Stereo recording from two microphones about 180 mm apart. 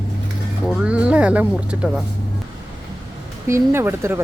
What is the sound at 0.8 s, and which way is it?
Speech, 5° right (ahead or behind).